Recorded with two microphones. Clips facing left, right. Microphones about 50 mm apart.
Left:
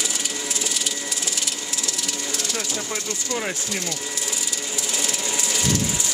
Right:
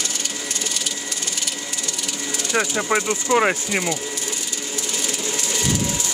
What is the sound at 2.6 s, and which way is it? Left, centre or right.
Speech, right.